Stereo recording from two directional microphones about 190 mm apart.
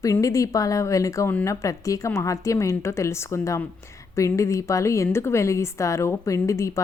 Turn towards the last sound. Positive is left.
turn(degrees=15)  # may be behind; listen again after turning